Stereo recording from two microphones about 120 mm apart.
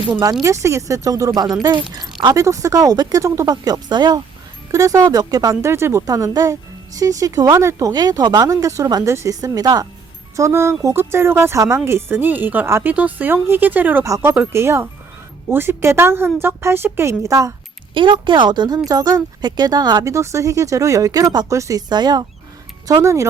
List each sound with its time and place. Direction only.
0.1 s a woman's voice: 35° right (ahead or behind)
17.9 s speech: 40° right (ahead or behind); by 23.3 s 25° right (ahead or behind)